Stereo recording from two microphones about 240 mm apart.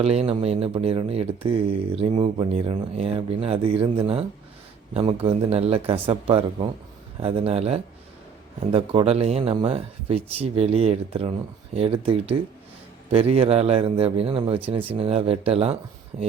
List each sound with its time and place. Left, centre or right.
0.0 s speech: right